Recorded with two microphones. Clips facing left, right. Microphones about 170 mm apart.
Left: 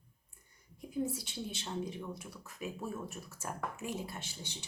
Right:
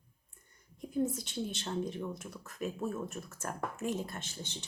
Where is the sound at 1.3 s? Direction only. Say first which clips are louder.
Right 4 dB; 50° right (ahead or behind).